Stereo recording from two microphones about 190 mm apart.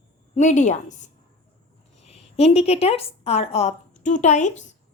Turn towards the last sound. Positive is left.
turn(degrees=40)  # may be behind; listen again after turning